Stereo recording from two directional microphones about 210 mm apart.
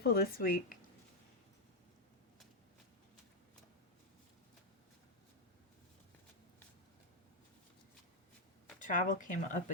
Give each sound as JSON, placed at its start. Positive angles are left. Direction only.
{"t": 0.0, "sound": "speech", "side_deg": 45}
{"t": 8.8, "sound": "speech", "side_deg": 40}